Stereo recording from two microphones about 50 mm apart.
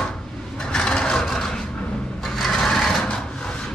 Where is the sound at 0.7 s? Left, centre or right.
Centre.